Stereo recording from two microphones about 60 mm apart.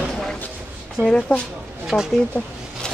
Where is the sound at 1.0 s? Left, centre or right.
Right.